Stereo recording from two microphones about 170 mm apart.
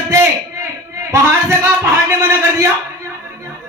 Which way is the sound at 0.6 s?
15° right (ahead or behind).